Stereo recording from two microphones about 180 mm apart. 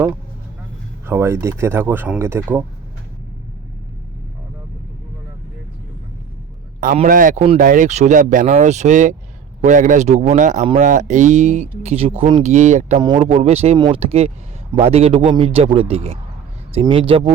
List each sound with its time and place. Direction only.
1.0 s speech: 15° right (ahead or behind)
6.7 s speech: 40° right (ahead or behind)
13.0 s speech: 30° right (ahead or behind)